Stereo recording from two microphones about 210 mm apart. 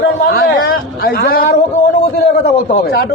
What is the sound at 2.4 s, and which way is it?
Speech, 50° left (ahead or behind).